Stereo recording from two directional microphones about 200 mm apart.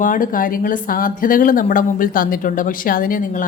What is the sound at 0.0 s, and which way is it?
Speech, 40° left (ahead or behind).